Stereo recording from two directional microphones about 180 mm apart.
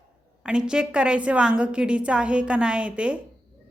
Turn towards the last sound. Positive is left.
turn(degrees=-5)  # may be behind; listen again after turning